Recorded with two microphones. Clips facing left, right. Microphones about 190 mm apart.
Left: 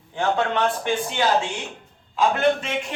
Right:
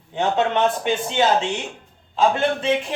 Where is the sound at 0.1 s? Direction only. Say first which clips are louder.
Right 2 dB; 20° right (ahead or behind).